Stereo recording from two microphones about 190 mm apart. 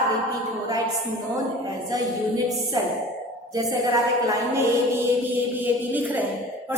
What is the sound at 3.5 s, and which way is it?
A woman's voice, 15° right (ahead or behind).